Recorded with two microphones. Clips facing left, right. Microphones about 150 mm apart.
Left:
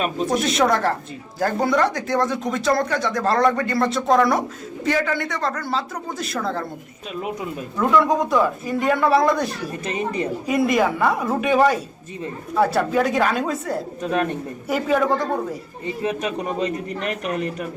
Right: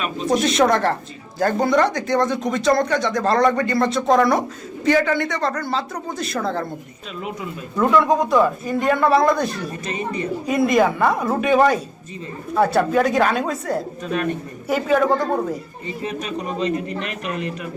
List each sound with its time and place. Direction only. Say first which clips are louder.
0.3 s speech: right 4 dB; 5° left (ahead or behind)
7.8 s speech: right 2 dB; centre (ahead or behind)
16.6 s a man's voice: right 2 dB; 45° left (ahead or behind)